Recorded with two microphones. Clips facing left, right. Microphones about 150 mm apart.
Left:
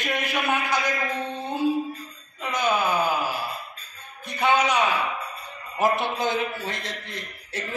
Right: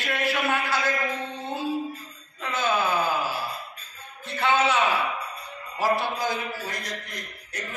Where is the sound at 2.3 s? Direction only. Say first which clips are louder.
Left 1 dB; 15° left (ahead or behind).